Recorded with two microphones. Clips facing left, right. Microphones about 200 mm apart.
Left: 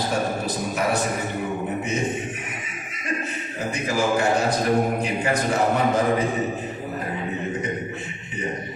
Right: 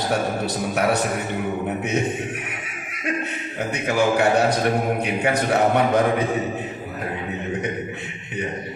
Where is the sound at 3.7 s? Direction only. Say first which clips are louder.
Right 2 dB; 65° right (ahead or behind).